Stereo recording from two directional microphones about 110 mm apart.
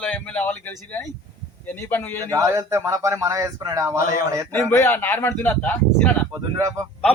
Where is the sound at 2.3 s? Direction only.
30° right (ahead or behind).